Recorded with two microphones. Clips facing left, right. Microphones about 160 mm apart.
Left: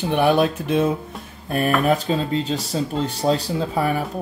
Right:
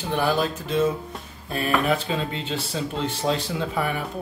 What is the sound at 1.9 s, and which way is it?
Speech, 40° left (ahead or behind).